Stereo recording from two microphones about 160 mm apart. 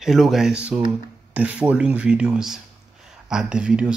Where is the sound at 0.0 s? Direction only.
Centre (ahead or behind).